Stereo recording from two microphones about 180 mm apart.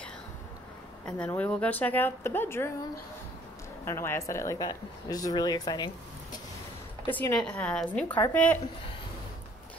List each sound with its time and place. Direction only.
1.0 s speech: 5° left (ahead or behind)
3.8 s speech: 15° left (ahead or behind)
7.1 s speech: 10° left (ahead or behind)